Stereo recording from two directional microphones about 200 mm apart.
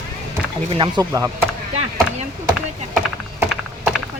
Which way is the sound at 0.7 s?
20° right (ahead or behind).